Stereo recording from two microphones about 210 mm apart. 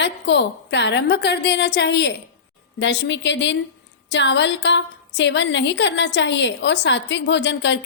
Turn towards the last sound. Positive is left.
turn(degrees=60)  # may be behind; listen again after turning